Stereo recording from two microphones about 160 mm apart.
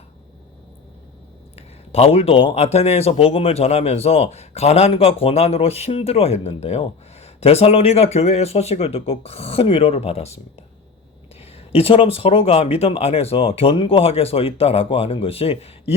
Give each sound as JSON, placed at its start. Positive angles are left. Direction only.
{"t": 1.5, "sound": "speech", "side_deg": 40}
{"t": 11.7, "sound": "speech", "side_deg": 35}